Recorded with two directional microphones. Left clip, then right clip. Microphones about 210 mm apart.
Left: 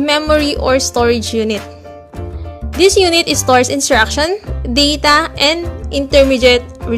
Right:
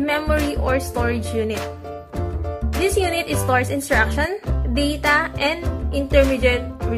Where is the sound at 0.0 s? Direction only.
50° left (ahead or behind).